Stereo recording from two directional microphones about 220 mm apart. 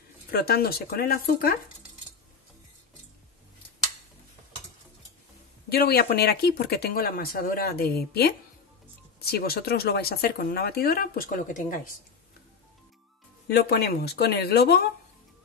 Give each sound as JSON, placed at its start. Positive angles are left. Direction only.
{"t": 0.3, "sound": "speech", "side_deg": 45}
{"t": 5.7, "sound": "speech", "side_deg": 45}
{"t": 13.5, "sound": "speech", "side_deg": 45}